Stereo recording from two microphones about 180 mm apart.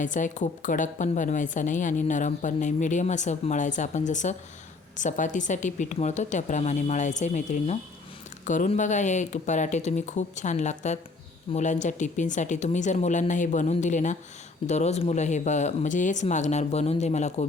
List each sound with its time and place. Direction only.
0.0 s a woman's voice: 45° left (ahead or behind)